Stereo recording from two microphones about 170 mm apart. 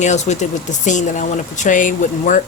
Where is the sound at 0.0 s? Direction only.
45° left (ahead or behind).